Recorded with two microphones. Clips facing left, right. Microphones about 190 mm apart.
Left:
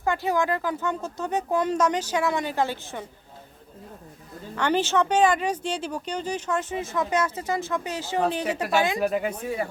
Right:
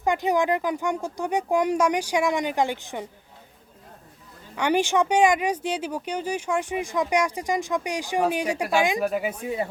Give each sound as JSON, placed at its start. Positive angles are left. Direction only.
{"t": 0.0, "sound": "speech", "side_deg": -15}
{"t": 4.5, "sound": "speech", "side_deg": -10}